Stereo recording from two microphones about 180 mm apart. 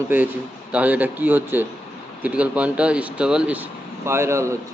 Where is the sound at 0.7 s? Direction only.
10° right (ahead or behind).